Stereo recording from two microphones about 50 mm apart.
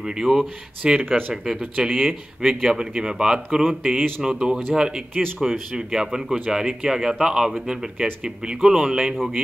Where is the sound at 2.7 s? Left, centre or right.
Centre.